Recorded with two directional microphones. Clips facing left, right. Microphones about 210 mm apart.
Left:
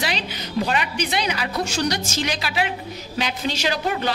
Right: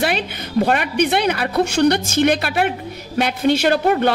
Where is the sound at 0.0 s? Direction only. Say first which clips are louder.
Right 6 dB; 55° right (ahead or behind).